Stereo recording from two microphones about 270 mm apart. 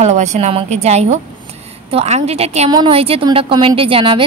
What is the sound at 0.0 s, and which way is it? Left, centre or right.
A woman's voice, right.